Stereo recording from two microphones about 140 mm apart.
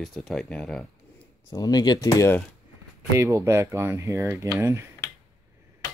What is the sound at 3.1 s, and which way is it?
Speech, 20° right (ahead or behind).